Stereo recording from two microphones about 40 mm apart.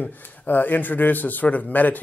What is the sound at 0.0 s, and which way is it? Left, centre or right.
A man's voice, left.